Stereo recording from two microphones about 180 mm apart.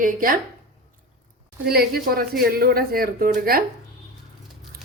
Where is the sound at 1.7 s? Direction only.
60° right (ahead or behind).